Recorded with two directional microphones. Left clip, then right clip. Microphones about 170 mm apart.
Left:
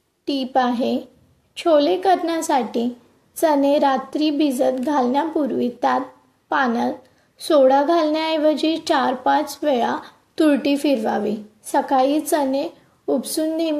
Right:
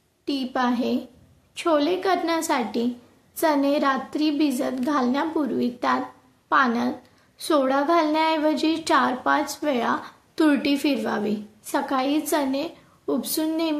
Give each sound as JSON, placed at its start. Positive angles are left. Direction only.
{"t": 0.2, "sound": "a woman's voice", "side_deg": 10}